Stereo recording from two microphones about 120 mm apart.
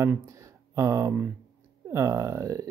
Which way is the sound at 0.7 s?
25° right (ahead or behind).